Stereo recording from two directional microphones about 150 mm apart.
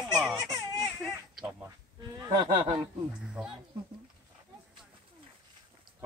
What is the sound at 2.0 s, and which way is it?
Honk, 30° right (ahead or behind).